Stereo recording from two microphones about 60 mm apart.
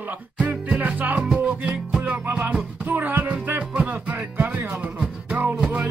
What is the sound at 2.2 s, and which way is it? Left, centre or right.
Music, right.